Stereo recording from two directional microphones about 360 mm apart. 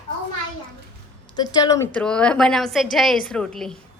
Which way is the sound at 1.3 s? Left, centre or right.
Centre.